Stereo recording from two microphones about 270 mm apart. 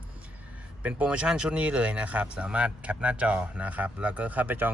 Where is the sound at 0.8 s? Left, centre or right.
Centre.